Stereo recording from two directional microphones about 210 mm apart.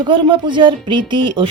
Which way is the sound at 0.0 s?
25° right (ahead or behind).